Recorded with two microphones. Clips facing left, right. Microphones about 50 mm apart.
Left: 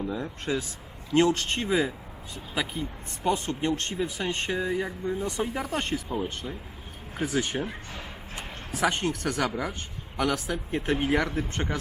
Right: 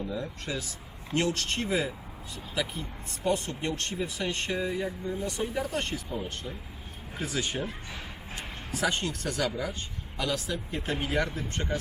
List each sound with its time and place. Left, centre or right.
0.1 s speech: left
6.1 s speech: left